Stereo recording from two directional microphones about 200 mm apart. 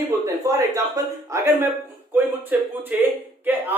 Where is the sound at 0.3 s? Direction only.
15° right (ahead or behind).